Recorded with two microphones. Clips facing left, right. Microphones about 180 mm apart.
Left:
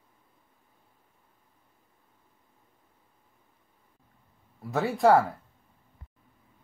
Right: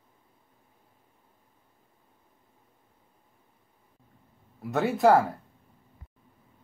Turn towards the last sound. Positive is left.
turn(degrees=0)  # may be behind; listen again after turning